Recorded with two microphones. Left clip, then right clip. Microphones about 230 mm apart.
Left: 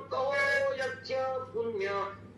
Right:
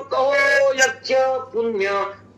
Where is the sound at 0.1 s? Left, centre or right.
Right.